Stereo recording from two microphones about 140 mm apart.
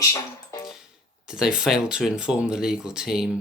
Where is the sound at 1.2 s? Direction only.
5° right (ahead or behind).